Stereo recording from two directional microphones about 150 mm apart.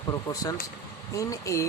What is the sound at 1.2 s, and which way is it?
Speech, 20° left (ahead or behind).